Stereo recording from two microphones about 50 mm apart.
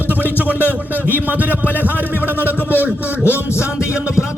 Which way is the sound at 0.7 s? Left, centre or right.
Right.